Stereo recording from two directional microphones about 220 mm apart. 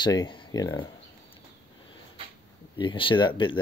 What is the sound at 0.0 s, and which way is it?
Speech, 20° left (ahead or behind).